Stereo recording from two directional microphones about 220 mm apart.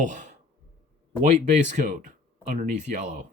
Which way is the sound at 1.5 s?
35° right (ahead or behind).